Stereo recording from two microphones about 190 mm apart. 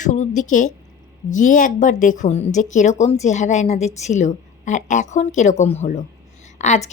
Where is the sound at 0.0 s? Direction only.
40° left (ahead or behind).